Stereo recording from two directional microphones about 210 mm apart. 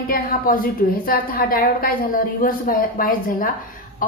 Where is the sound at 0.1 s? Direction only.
40° left (ahead or behind).